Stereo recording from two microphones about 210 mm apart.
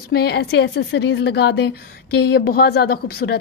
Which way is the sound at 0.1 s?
50° left (ahead or behind).